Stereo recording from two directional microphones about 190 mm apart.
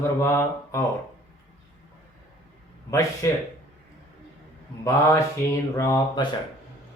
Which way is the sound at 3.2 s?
15° left (ahead or behind).